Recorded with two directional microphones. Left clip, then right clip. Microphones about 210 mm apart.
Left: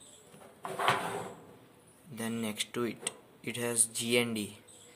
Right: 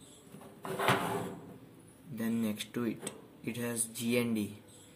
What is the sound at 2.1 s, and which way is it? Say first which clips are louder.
Speech: even; 35° left (ahead or behind).